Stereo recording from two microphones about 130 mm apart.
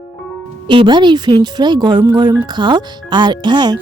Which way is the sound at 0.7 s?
40° right (ahead or behind).